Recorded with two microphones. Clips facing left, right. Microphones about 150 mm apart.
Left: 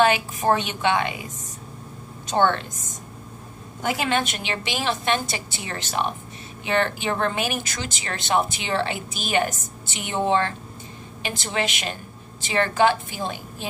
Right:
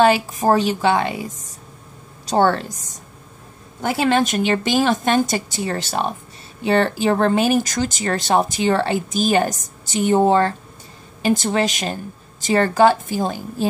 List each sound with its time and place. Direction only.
0.0 s speech: 35° right (ahead or behind)
2.2 s speech: 35° right (ahead or behind)